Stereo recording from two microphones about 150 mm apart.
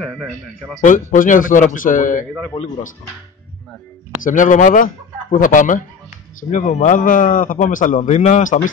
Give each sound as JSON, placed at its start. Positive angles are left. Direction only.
{"t": 0.0, "sound": "speech", "side_deg": 5}
{"t": 0.7, "sound": "a man's voice", "side_deg": 60}
{"t": 2.5, "sound": "speech", "side_deg": 25}
{"t": 4.2, "sound": "a man's voice", "side_deg": 60}